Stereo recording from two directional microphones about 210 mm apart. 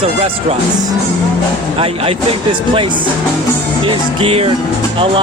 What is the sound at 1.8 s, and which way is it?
Speech, 25° right (ahead or behind).